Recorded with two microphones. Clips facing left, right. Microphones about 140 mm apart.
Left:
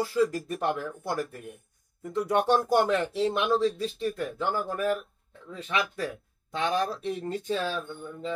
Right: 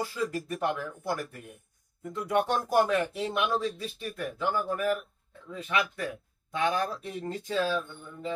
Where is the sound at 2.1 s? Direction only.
30° left (ahead or behind).